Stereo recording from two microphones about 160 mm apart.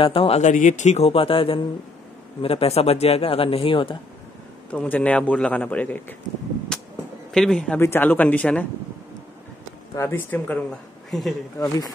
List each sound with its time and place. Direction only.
0.0 s speech: 35° left (ahead or behind)
4.6 s a man's voice: 10° left (ahead or behind)
6.7 s a sound: 5° left (ahead or behind)
7.3 s a man's voice: 5° left (ahead or behind)
9.9 s a man's voice: 15° left (ahead or behind)
11.6 s speech: 20° left (ahead or behind)